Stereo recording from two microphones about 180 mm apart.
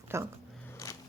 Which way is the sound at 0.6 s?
15° left (ahead or behind).